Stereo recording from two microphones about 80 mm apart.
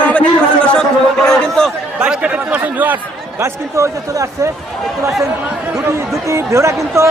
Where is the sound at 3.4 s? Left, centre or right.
Right.